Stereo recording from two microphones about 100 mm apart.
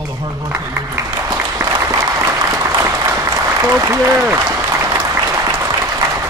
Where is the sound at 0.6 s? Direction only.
30° right (ahead or behind).